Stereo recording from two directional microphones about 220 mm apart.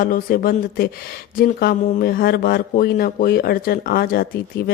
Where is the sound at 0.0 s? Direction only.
40° left (ahead or behind).